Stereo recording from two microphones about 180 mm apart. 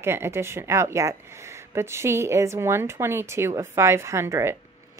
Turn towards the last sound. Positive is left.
turn(degrees=-15)  # may be behind; listen again after turning